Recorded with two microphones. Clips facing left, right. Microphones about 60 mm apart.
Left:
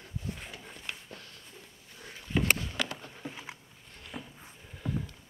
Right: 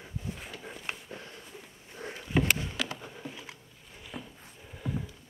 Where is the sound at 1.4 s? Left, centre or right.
Centre.